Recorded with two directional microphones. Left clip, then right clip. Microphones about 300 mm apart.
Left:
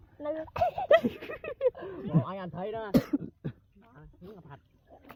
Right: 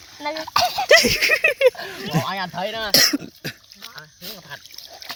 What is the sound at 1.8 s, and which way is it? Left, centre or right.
Speech, left.